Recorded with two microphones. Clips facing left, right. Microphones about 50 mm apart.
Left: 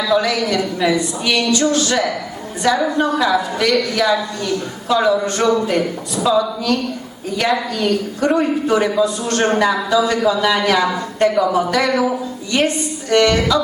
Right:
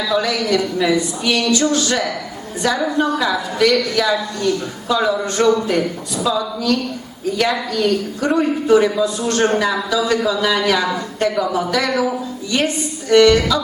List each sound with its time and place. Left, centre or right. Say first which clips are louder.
0.0 s a man's voice: left 2 dB; centre